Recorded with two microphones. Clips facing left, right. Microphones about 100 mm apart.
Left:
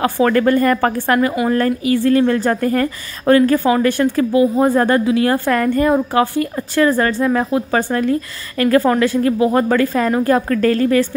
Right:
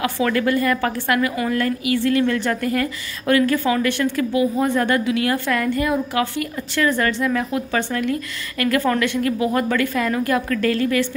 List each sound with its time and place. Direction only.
0.0 s a woman's voice: 40° left (ahead or behind)